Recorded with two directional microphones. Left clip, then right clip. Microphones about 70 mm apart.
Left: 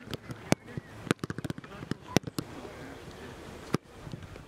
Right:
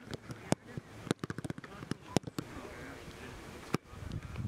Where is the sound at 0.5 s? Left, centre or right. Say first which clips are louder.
Left 5 dB; left.